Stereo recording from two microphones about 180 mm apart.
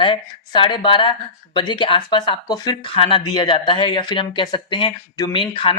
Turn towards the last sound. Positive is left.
turn(degrees=30)  # may be behind; listen again after turning